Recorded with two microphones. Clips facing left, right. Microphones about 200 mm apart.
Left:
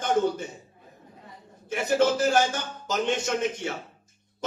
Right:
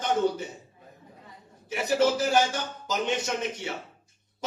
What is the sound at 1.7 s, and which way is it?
Speech, 55° left (ahead or behind).